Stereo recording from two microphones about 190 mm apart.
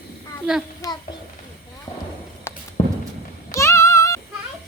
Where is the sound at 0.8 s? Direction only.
15° left (ahead or behind).